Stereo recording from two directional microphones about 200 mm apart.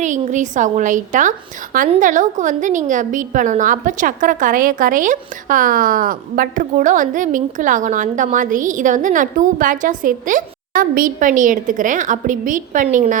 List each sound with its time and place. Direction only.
0.0 s a woman's voice: 40° right (ahead or behind)